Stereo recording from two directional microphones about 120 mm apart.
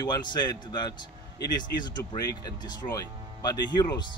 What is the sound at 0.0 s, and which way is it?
Speech, 35° left (ahead or behind).